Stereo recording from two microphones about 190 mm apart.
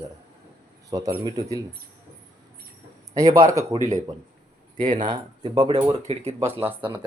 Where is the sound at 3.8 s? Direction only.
40° right (ahead or behind).